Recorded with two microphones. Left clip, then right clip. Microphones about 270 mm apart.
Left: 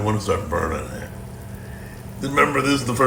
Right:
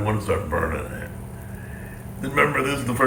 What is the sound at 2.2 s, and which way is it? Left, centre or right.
Speech, left.